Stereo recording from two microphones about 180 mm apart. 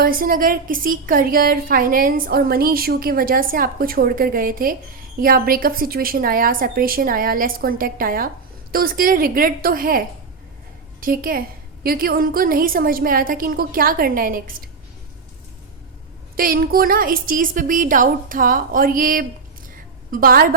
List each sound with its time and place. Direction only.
0.0 s a woman's voice: 50° right (ahead or behind)
11.0 s a woman's voice: 50° right (ahead or behind)
16.3 s a woman's voice: 55° right (ahead or behind)